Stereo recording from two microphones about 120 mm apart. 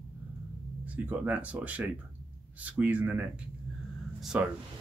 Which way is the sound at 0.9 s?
15° right (ahead or behind).